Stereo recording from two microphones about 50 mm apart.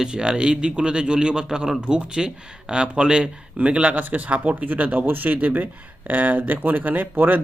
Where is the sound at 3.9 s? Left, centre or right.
Right.